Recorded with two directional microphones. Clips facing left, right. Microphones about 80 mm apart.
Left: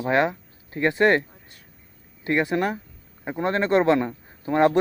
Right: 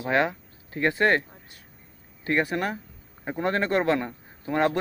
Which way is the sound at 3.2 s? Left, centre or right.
Centre.